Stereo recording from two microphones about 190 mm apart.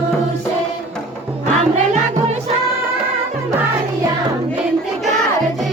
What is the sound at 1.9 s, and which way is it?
Music, 35° right (ahead or behind).